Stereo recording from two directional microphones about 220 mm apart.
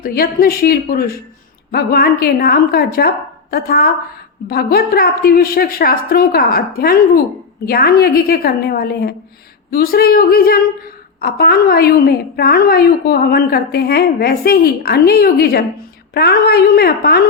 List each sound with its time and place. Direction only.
0.0 s a woman's voice: 45° left (ahead or behind)